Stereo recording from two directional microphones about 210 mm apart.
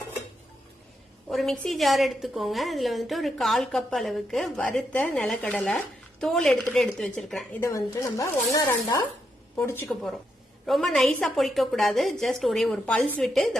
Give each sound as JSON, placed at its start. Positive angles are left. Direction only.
{"t": 1.3, "sound": "a woman's voice", "side_deg": 0}
{"t": 7.6, "sound": "a woman's voice", "side_deg": 15}